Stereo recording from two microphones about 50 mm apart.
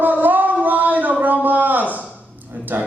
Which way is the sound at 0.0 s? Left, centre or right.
Right.